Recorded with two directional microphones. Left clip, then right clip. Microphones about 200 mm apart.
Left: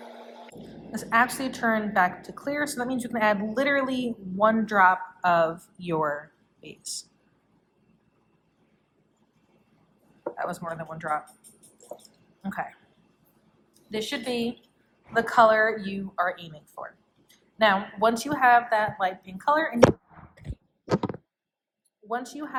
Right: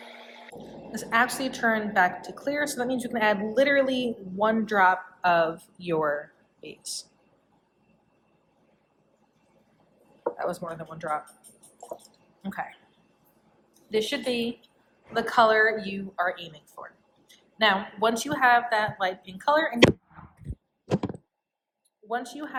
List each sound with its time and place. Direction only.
0.0 s a sound: centre (ahead or behind)
1.1 s a woman's voice: 35° left (ahead or behind)
5.5 s speech: centre (ahead or behind)
5.8 s a woman's voice: 30° left (ahead or behind)
6.6 s speech: centre (ahead or behind)
10.3 s a sound: 35° left (ahead or behind)
10.6 s a woman's voice: 40° left (ahead or behind)
12.4 s speech: 30° left (ahead or behind)
13.9 s a woman's voice: 35° left (ahead or behind)
19.9 s a sound: centre (ahead or behind)
22.1 s a woman's voice: 35° left (ahead or behind)